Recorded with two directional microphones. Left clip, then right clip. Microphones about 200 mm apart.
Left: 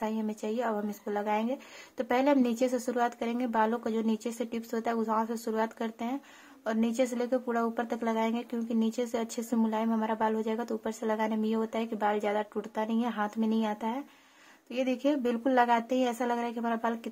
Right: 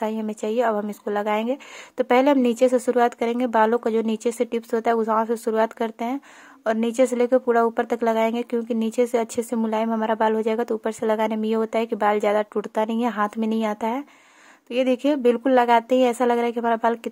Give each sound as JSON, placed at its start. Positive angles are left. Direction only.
{"t": 0.0, "sound": "speech", "side_deg": -35}